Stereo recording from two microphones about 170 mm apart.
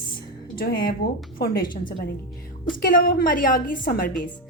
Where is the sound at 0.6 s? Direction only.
60° left (ahead or behind).